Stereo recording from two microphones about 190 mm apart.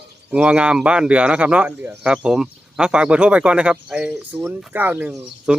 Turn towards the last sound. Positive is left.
turn(degrees=-10)  # may be behind; listen again after turning